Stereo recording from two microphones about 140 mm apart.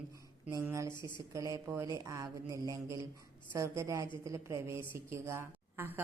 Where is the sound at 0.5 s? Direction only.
20° right (ahead or behind).